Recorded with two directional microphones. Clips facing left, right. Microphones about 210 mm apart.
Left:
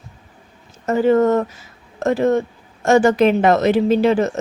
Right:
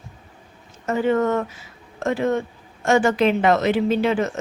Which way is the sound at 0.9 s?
40° left (ahead or behind).